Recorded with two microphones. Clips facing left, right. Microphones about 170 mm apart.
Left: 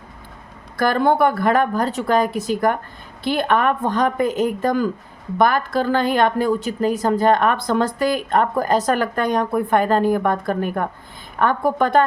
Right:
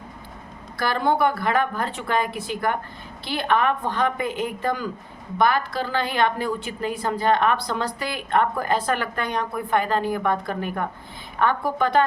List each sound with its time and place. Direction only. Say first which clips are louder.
0.8 s a woman's voice: left 5 dB; 50° left (ahead or behind)